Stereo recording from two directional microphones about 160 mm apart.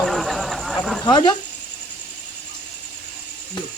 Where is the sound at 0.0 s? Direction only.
Centre (ahead or behind).